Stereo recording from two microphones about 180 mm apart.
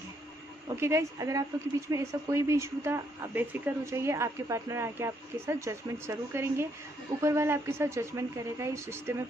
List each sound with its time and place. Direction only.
0.7 s a woman's voice: 15° right (ahead or behind)